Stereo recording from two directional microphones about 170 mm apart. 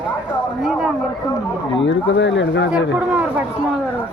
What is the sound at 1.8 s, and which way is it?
Speech, 90° left.